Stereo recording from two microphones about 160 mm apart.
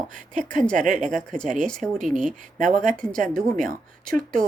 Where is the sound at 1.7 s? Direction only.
5° left (ahead or behind).